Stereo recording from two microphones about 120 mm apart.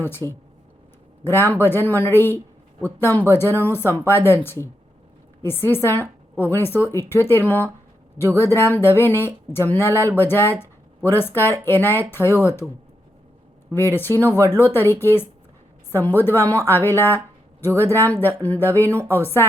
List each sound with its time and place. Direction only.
0.0 s speech: 20° left (ahead or behind)
13.7 s a woman's voice: 20° left (ahead or behind)